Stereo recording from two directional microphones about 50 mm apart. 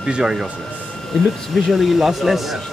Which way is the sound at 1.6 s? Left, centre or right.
Centre.